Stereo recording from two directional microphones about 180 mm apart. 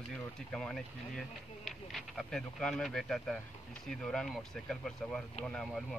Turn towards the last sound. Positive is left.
turn(degrees=0)  # may be behind; listen again after turning